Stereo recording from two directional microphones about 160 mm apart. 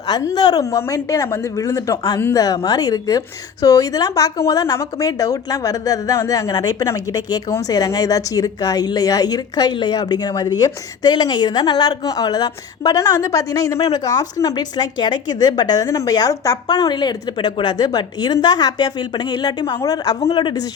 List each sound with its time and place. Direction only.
0.1 s a woman's voice: 20° left (ahead or behind)
20.1 s a woman's voice: 35° left (ahead or behind)